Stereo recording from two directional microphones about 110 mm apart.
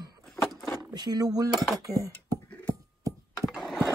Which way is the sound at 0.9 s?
35° right (ahead or behind).